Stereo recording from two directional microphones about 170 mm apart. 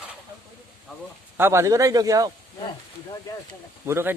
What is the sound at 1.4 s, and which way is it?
Speech, 15° right (ahead or behind).